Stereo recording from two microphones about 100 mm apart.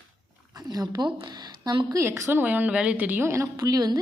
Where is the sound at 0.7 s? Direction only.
40° right (ahead or behind).